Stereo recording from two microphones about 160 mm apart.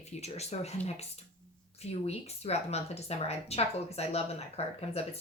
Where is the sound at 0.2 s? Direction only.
40° left (ahead or behind).